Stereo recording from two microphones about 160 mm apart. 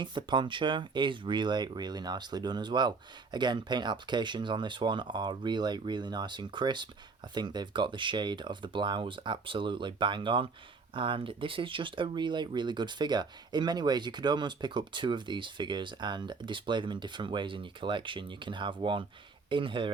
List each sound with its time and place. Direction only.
0.0 s speech: 30° right (ahead or behind)